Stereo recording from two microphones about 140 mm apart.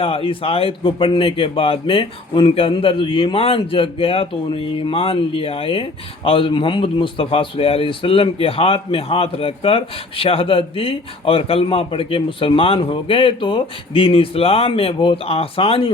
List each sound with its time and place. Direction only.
0.0 s speech: 40° left (ahead or behind)